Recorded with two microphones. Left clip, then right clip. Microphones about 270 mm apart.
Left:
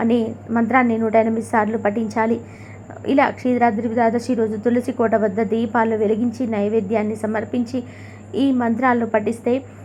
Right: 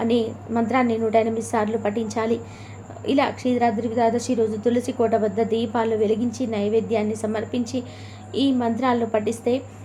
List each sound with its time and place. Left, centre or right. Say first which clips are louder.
0.0 s a woman's voice: left 2 dB; centre